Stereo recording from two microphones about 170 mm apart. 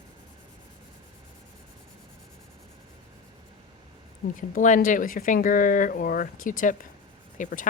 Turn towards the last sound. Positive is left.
turn(degrees=50)  # may be behind; listen again after turning